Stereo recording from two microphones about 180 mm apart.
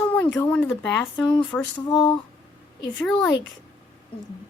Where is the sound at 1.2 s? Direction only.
25° left (ahead or behind).